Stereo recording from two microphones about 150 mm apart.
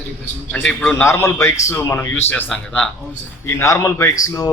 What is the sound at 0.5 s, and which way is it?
A man's voice, 10° left (ahead or behind).